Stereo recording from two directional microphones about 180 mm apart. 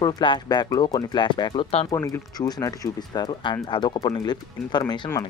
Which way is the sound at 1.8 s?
20° left (ahead or behind).